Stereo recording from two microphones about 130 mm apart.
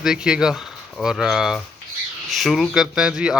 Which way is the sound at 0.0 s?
5° right (ahead or behind).